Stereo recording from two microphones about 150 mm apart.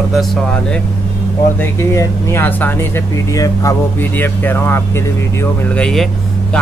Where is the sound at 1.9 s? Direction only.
20° left (ahead or behind).